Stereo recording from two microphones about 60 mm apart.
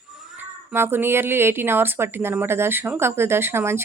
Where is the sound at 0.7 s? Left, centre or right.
Right.